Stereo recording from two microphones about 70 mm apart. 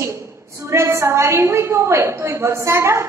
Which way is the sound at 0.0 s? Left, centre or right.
Right.